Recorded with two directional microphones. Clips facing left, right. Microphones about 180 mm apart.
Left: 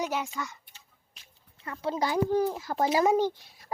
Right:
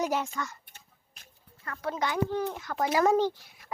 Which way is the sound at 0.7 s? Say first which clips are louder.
Right 2 dB; 55° right (ahead or behind).